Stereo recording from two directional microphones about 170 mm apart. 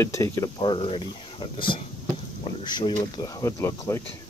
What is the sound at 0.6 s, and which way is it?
Speech, 30° left (ahead or behind).